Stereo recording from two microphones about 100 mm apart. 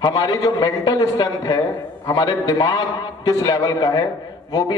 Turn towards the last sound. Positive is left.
turn(degrees=45)  # may be behind; listen again after turning